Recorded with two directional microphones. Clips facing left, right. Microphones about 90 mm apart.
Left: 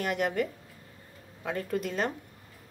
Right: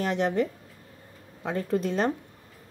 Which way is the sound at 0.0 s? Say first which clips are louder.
Right 3 dB; 30° right (ahead or behind).